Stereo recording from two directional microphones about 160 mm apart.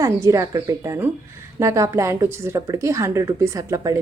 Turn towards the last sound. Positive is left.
turn(degrees=-20)  # may be behind; listen again after turning